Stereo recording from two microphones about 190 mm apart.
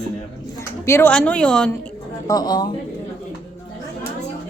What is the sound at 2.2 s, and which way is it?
Speech, 20° left (ahead or behind).